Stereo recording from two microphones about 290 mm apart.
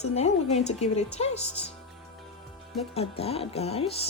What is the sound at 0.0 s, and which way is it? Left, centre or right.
A woman's voice, left.